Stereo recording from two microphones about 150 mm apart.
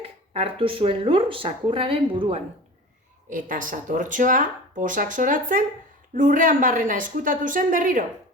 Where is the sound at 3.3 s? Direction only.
65° right (ahead or behind).